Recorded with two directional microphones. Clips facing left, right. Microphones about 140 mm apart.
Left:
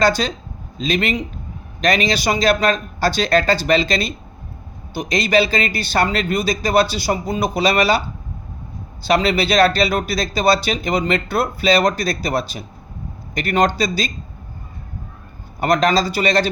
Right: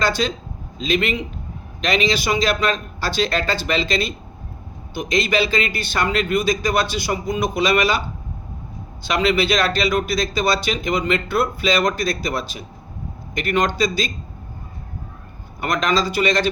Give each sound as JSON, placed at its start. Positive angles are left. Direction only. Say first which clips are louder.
{"t": 0.0, "sound": "speech", "louder": "left 3 dB", "side_deg": 40}
{"t": 9.0, "sound": "speech", "louder": "left 2 dB", "side_deg": 35}
{"t": 15.6, "sound": "speech", "louder": "left 4 dB", "side_deg": 35}